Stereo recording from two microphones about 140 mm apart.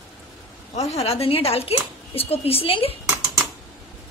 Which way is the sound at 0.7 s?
50° left (ahead or behind).